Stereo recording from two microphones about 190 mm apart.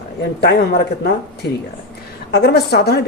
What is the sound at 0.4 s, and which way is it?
Speech, 60° left (ahead or behind).